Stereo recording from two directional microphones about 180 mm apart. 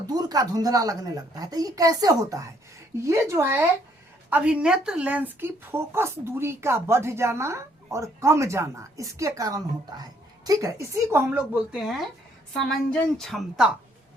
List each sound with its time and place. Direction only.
0.1 s a child's voice: 20° right (ahead or behind); by 13.7 s centre (ahead or behind)